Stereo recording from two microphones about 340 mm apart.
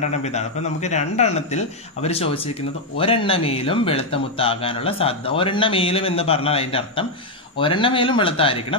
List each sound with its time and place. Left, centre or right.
0.2 s a man's voice: centre